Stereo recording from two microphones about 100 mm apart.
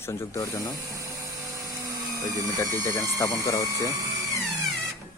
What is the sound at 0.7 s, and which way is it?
Dental drill, 35° right (ahead or behind).